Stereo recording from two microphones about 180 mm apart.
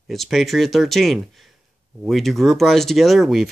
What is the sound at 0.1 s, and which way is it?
Speech, centre (ahead or behind).